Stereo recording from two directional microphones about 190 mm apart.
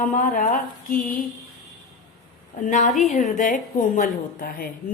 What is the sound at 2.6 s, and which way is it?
A woman's voice, 40° left (ahead or behind).